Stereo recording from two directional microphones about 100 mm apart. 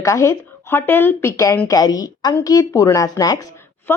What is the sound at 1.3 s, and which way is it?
A woman's voice, 30° left (ahead or behind).